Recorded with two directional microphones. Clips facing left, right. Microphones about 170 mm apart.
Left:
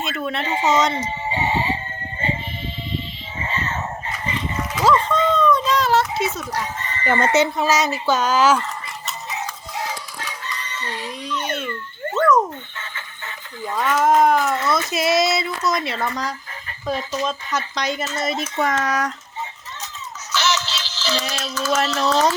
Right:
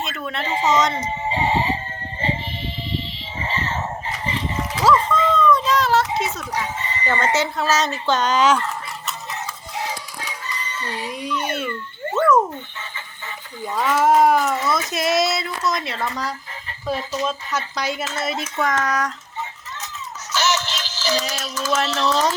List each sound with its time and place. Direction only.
0.0 s a woman's voice: 5° left (ahead or behind)
1.0 s speech: 30° right (ahead or behind)
4.3 s dog: 25° right (ahead or behind)
4.9 s a sound: centre (ahead or behind)
6.5 s chicken: 10° right (ahead or behind)
7.3 s speech: 15° left (ahead or behind)
10.7 s a child's voice: 5° right (ahead or behind)
12.1 s a sound: 5° right (ahead or behind)
13.7 s speech: 5° right (ahead or behind)
18.6 s speech: 5° left (ahead or behind)
20.3 s music: 45° right (ahead or behind)
21.0 s music: 15° right (ahead or behind)
21.2 s a child's voice: 5° right (ahead or behind)
21.8 s speech: centre (ahead or behind)